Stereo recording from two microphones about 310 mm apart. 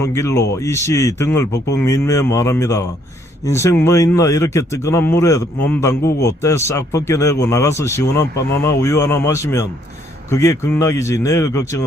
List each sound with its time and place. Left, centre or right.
0.0 s a man's voice: centre